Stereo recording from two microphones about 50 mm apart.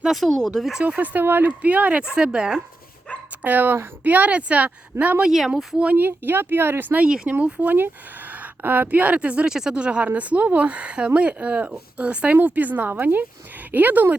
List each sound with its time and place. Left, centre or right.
0.0 s speech: centre
0.3 s speech: centre
0.9 s speech: right
2.1 s speech: centre
3.1 s dog: left
3.4 s speech: right
5.2 s speech: centre
6.0 s speech: right
7.0 s speech: right
7.6 s a woman's voice: right
9.5 s speech: centre; by 14.2 s right